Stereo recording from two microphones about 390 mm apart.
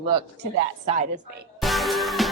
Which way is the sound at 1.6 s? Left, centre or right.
Centre.